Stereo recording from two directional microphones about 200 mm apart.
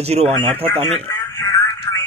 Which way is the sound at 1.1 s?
15° left (ahead or behind).